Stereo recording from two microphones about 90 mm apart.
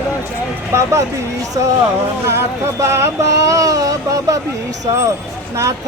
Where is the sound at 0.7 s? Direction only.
35° right (ahead or behind).